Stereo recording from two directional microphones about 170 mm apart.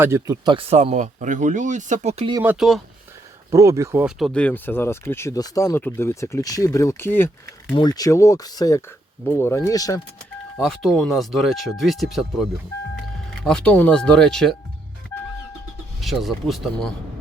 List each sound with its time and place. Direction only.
0.0 s speech: 20° right (ahead or behind); by 2.3 s 40° right (ahead or behind)
2.4 s speech: 5° right (ahead or behind)
3.5 s speech: 15° right (ahead or behind)
4.0 s speech: 5° left (ahead or behind); by 10.0 s 20° left (ahead or behind)
10.6 s speech: centre (ahead or behind)
16.0 s speech: centre (ahead or behind)